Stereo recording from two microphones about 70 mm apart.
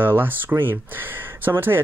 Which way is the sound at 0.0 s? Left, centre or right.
Right.